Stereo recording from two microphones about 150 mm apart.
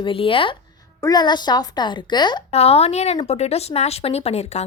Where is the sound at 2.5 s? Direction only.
45° left (ahead or behind).